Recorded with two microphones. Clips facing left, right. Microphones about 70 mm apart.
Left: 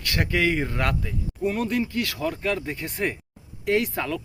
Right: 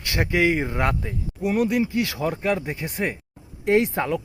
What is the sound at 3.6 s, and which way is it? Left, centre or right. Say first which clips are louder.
Speech: right 4 dB; right.